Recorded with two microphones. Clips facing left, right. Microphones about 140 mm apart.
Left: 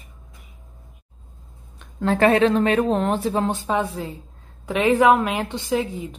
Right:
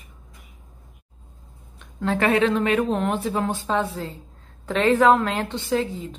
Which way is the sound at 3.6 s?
10° left (ahead or behind).